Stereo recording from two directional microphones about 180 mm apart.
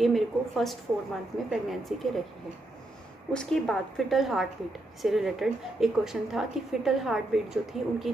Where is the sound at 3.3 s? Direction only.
Centre (ahead or behind).